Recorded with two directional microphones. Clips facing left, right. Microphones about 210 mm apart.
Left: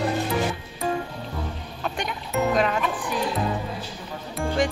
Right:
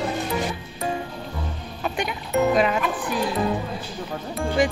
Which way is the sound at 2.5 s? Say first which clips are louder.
Right 2 dB; 5° right (ahead or behind).